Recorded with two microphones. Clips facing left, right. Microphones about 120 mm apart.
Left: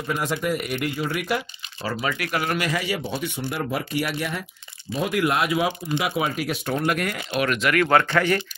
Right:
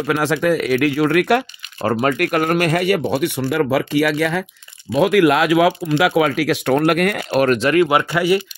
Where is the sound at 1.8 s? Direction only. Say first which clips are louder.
Right 10 dB; 50° right (ahead or behind).